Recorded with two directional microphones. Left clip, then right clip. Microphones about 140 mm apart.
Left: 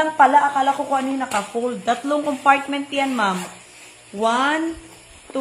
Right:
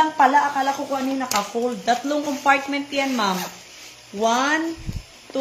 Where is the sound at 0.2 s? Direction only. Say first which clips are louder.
Left 5 dB; 35° left (ahead or behind).